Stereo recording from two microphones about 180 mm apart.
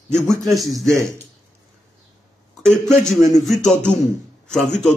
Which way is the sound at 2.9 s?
5° left (ahead or behind).